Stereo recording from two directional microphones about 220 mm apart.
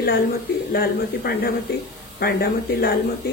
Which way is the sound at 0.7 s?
45° left (ahead or behind).